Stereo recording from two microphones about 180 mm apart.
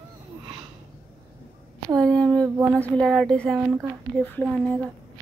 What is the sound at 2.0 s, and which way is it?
Speech, 5° left (ahead or behind).